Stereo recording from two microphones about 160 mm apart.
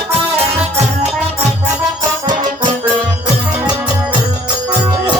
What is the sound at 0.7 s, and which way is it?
Music, 45° right (ahead or behind).